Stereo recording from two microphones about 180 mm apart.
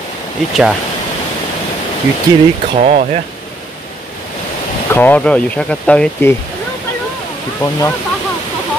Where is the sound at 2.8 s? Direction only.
40° right (ahead or behind).